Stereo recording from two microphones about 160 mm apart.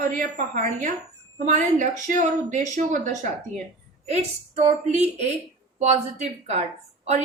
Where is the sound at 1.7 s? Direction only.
50° right (ahead or behind).